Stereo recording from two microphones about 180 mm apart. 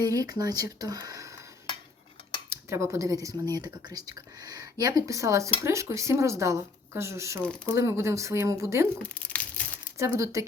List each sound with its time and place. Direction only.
0.0 s speech: 20° right (ahead or behind)
2.5 s speech: 15° right (ahead or behind)
9.1 s crushing: 5° left (ahead or behind)
10.0 s speech: 15° right (ahead or behind)